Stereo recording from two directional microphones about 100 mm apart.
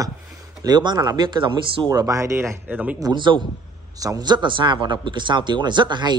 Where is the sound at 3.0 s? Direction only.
50° right (ahead or behind).